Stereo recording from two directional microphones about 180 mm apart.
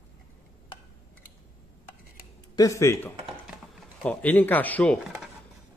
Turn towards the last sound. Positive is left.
turn(degrees=5)  # may be behind; listen again after turning